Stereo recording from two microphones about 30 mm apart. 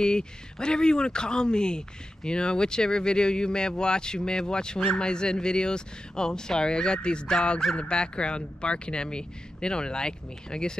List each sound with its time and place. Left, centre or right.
0.0 s speech: left